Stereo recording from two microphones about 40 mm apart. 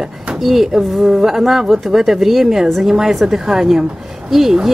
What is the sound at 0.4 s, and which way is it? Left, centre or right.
A woman's voice, centre.